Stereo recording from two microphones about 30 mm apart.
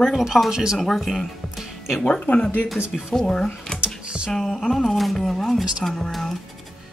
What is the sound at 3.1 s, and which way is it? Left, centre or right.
Speech, left.